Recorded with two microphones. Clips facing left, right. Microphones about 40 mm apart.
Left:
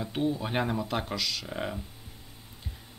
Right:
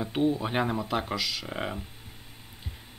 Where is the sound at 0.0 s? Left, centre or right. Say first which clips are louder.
Right 3 dB; centre.